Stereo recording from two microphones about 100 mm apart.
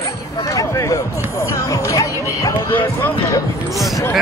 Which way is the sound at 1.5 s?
35° left (ahead or behind).